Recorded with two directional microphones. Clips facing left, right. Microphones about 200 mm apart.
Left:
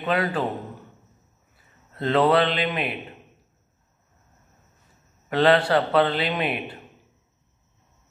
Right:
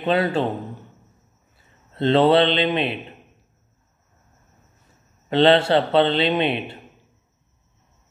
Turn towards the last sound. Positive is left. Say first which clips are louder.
# right 5 dB
turn(degrees=-25)  # may be behind; listen again after turning